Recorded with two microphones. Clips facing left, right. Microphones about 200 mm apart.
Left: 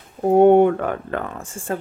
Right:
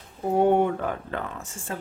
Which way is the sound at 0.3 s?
60° left (ahead or behind).